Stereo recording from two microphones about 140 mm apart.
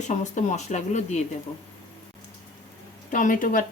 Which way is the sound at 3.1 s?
70° left (ahead or behind).